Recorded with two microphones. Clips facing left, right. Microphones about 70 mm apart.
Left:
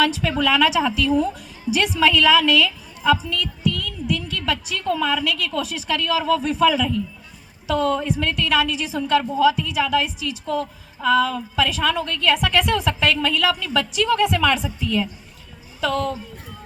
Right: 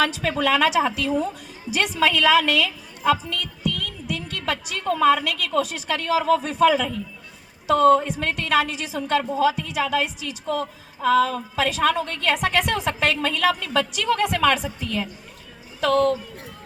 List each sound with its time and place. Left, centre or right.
0.0 s a woman's voice: right
3.8 s a sound: right
4.8 s a woman's voice: right